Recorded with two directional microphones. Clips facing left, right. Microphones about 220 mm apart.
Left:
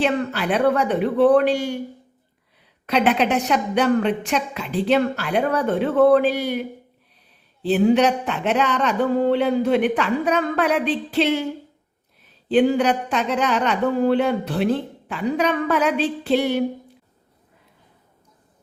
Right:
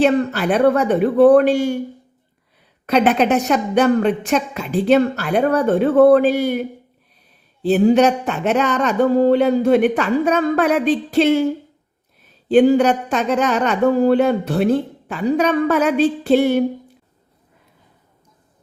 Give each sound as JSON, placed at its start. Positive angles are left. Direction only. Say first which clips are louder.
{"t": 0.0, "sound": "speech", "louder": "right 6 dB", "side_deg": -45}
{"t": 2.8, "sound": "speech", "louder": "right 4 dB", "side_deg": -45}
{"t": 12.5, "sound": "speech", "louder": "right 5 dB", "side_deg": -45}